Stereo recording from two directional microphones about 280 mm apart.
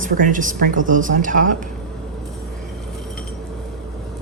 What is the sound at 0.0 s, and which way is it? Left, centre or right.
Speech, right.